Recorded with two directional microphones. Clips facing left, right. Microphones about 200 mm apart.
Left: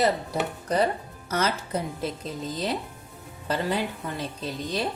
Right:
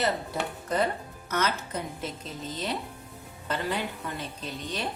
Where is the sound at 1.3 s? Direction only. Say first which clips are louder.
Left 3 dB; 35° left (ahead or behind).